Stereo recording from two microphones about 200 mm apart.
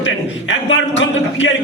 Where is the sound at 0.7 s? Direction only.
65° left (ahead or behind).